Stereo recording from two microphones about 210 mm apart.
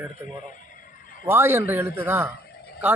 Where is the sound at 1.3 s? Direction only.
10° right (ahead or behind).